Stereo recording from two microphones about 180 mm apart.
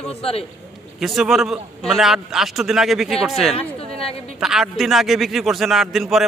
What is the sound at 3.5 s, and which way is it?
Speech, 35° left (ahead or behind).